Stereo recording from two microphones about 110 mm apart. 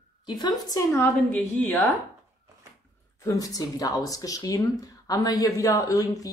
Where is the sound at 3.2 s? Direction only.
30° left (ahead or behind).